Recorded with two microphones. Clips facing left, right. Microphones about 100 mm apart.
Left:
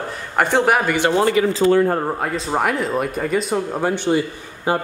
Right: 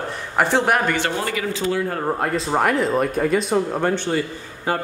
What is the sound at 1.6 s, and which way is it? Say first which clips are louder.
Speech: left 8 dB; 45° left (ahead or behind).